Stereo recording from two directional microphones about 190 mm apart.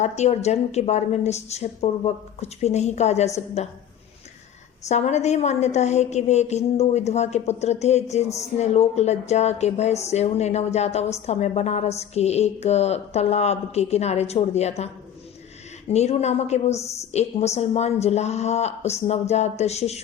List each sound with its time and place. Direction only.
0.0 s speech: 35° left (ahead or behind)
4.9 s speech: 35° left (ahead or behind)
15.9 s speech: 35° left (ahead or behind)